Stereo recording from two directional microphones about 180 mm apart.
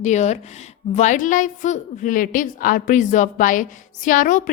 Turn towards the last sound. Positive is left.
turn(degrees=50)  # may be behind; listen again after turning